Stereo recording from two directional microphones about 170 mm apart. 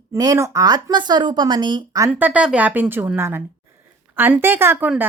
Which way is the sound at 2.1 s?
10° right (ahead or behind).